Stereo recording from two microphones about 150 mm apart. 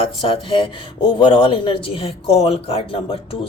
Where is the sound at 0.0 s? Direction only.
35° left (ahead or behind).